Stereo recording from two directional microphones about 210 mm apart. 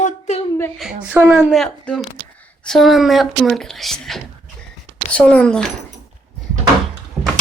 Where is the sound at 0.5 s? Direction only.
10° left (ahead or behind).